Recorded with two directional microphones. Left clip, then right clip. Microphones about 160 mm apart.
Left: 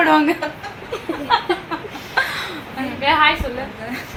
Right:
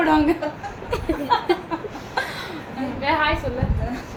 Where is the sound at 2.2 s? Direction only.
15° left (ahead or behind).